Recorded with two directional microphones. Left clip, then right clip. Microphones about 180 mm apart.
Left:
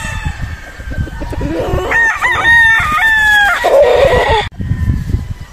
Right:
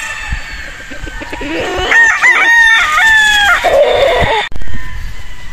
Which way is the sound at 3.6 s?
30° left (ahead or behind).